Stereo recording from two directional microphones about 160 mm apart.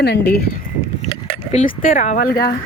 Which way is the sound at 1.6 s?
55° left (ahead or behind).